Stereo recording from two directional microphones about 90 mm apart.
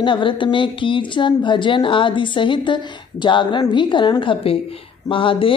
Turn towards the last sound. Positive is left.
turn(degrees=70)  # may be behind; listen again after turning